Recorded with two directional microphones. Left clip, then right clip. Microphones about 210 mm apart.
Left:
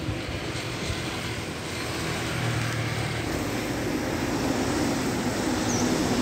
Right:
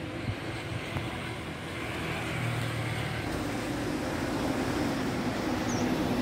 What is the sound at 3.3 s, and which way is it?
Vehicle, 50° right (ahead or behind).